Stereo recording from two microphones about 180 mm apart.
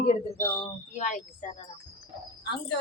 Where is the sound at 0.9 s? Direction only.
45° left (ahead or behind).